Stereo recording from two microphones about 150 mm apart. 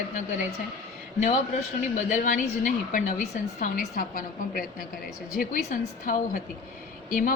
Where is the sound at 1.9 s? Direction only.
60° left (ahead or behind).